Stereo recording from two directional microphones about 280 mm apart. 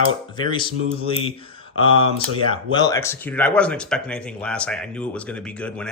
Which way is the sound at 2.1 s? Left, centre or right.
Centre.